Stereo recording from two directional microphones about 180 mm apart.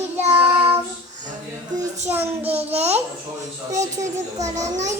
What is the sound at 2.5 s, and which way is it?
Babbling, 35° right (ahead or behind).